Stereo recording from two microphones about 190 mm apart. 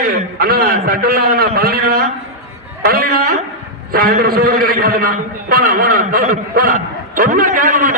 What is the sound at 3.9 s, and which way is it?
A man's voice, 50° right (ahead or behind).